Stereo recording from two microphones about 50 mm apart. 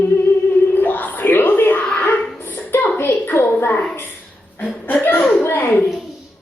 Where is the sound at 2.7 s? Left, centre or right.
Left.